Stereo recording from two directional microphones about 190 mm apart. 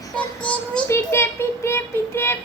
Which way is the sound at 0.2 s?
5° left (ahead or behind).